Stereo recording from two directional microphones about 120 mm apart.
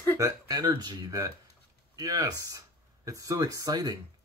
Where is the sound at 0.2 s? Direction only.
30° right (ahead or behind).